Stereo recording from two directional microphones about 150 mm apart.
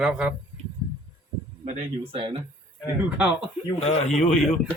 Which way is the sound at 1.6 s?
40° right (ahead or behind).